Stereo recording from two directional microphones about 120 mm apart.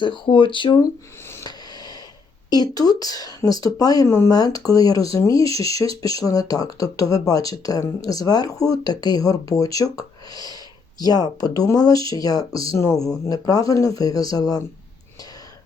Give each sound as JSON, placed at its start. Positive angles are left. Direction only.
{"t": 0.0, "sound": "speech", "side_deg": 45}
{"t": 1.5, "sound": "a sound", "side_deg": 35}
{"t": 2.5, "sound": "speech", "side_deg": 35}